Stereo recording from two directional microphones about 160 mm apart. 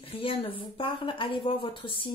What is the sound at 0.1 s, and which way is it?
Speech, 35° left (ahead or behind).